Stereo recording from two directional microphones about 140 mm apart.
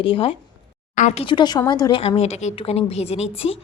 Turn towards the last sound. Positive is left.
turn(degrees=50)  # may be behind; listen again after turning